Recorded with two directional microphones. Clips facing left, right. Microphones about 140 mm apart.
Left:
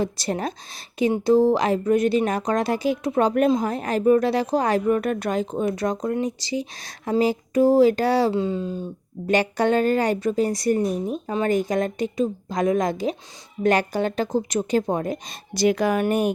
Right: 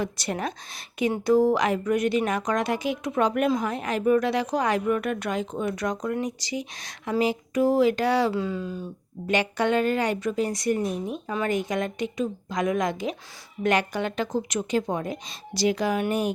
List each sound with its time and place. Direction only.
0.0 s a woman's voice: 35° left (ahead or behind)
9.2 s a woman's voice: 40° left (ahead or behind)